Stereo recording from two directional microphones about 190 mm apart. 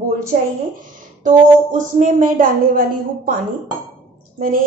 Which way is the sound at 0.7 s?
45° right (ahead or behind).